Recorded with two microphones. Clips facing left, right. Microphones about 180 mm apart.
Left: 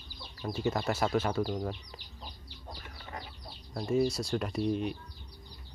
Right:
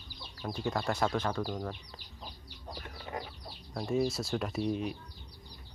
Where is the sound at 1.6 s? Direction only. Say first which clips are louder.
Left 3 dB; 15° left (ahead or behind).